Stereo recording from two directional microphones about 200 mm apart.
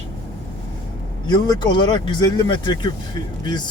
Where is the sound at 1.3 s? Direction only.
20° left (ahead or behind).